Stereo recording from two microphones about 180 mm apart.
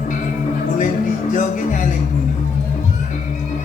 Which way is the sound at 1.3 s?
45° left (ahead or behind).